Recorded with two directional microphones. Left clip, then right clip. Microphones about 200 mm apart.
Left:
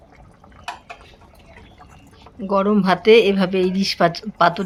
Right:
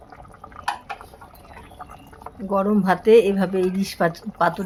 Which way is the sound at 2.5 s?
5° left (ahead or behind).